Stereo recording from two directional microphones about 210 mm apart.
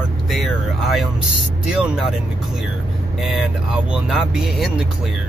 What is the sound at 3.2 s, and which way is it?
Speech, centre (ahead or behind).